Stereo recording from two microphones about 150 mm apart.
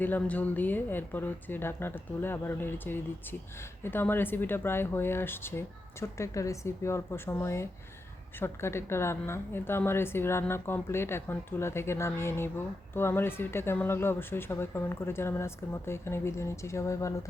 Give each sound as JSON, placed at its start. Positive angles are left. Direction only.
{"t": 0.0, "sound": "a woman's voice", "side_deg": 10}